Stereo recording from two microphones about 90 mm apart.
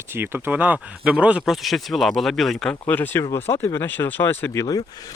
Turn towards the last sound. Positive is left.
turn(degrees=45)  # may be behind; listen again after turning